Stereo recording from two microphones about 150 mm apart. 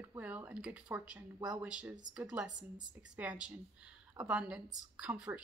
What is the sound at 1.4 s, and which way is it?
Speech, 25° right (ahead or behind).